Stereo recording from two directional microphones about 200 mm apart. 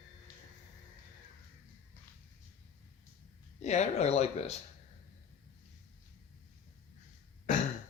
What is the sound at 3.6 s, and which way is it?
Speech, 35° left (ahead or behind).